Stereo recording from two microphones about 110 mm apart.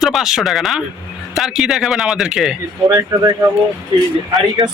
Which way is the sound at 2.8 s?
35° right (ahead or behind).